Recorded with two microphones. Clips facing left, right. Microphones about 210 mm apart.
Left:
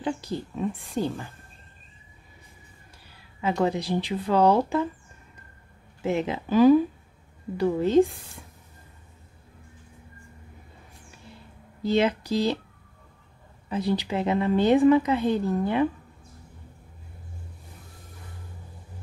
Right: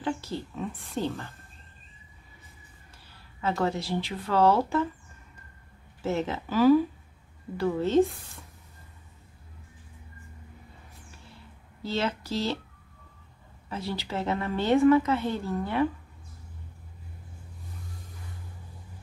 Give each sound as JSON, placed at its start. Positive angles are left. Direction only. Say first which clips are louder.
{"t": 0.0, "sound": "speech", "louder": "left 2 dB", "side_deg": 15}
{"t": 3.3, "sound": "speech", "louder": "left 3 dB", "side_deg": 15}
{"t": 6.0, "sound": "speech", "louder": "left 3 dB", "side_deg": 15}
{"t": 11.8, "sound": "speech", "louder": "left 7 dB", "side_deg": 15}
{"t": 13.7, "sound": "speech", "louder": "left 7 dB", "side_deg": 15}